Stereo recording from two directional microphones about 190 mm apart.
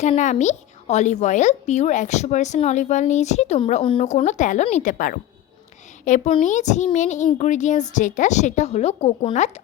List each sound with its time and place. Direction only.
0.0 s speech: 40° left (ahead or behind)